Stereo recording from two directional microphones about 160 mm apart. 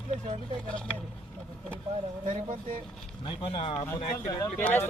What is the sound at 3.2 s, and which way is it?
Speech, 30° left (ahead or behind).